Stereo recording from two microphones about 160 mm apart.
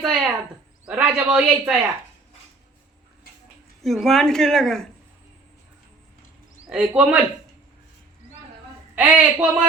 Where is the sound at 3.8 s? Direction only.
Centre (ahead or behind).